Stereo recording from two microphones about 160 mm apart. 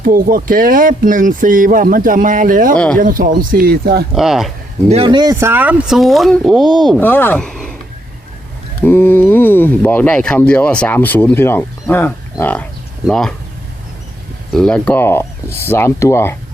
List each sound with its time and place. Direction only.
0.0 s speech: 60° right (ahead or behind)
2.7 s speech: 5° left (ahead or behind)
3.0 s speech: 60° right (ahead or behind); by 4.0 s 80° right
4.1 s speech: centre (ahead or behind)
4.9 s speech: 35° right (ahead or behind); by 7.0 s centre (ahead or behind)
7.0 s speech: 10° left (ahead or behind)
8.8 s speech: 15° left (ahead or behind)
14.5 s speech: 5° left (ahead or behind)